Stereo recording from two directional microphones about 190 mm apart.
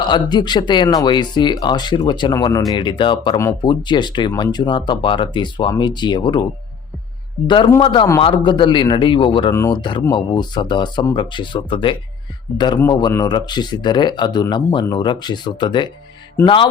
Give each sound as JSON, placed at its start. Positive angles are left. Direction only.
{"t": 0.1, "sound": "speech", "side_deg": 20}